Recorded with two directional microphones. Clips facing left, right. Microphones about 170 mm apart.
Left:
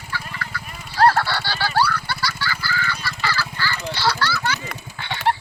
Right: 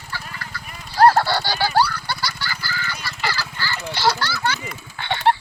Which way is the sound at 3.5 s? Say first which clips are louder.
Left 2 dB; 30° right (ahead or behind).